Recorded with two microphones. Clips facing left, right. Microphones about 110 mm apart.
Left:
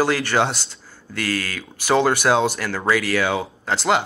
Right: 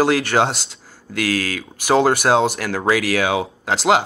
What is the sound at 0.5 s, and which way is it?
Speech, 75° right (ahead or behind).